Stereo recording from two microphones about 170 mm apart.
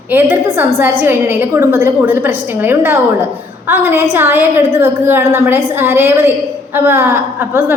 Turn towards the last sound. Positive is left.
turn(degrees=-10)  # may be behind; listen again after turning